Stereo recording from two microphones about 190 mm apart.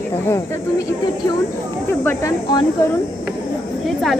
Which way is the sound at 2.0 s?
20° left (ahead or behind).